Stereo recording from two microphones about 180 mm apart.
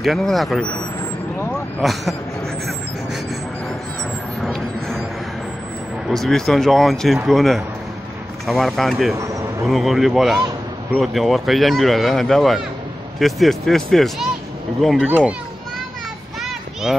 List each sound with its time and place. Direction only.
0.0 s speech: centre (ahead or behind)
1.8 s speech: centre (ahead or behind)
4.4 s a sound: centre (ahead or behind)
6.0 s speech: centre (ahead or behind)
9.2 s a sound: 15° right (ahead or behind)
9.7 s a child's voice: centre (ahead or behind)